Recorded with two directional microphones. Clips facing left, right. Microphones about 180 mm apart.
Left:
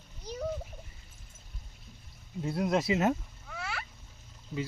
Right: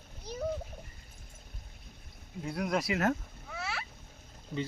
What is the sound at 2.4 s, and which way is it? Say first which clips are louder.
Speech: left 3 dB; 25° left (ahead or behind).